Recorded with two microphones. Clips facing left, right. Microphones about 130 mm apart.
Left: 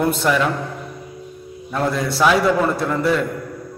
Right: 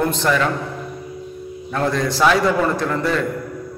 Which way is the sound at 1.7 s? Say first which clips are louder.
Right 1 dB; 5° left (ahead or behind).